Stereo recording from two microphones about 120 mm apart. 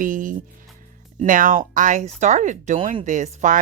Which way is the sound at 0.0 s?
90° right.